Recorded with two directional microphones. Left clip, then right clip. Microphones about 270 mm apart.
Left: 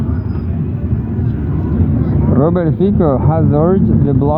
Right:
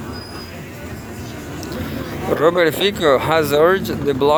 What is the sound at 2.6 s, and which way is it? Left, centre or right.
Speech, right.